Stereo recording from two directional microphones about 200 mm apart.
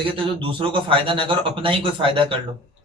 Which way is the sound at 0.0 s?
25° right (ahead or behind).